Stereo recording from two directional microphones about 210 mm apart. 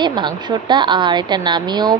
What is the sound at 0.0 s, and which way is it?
A woman's voice, 20° right (ahead or behind).